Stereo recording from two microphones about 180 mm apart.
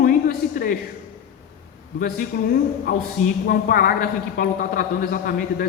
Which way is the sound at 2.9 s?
50° left (ahead or behind).